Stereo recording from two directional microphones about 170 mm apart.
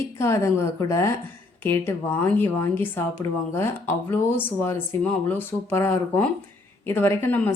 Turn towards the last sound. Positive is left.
turn(degrees=10)  # may be behind; listen again after turning